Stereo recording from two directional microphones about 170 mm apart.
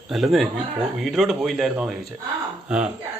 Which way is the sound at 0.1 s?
Centre (ahead or behind).